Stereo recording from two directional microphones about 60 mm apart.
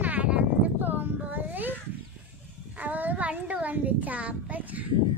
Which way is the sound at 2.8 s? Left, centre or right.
Right.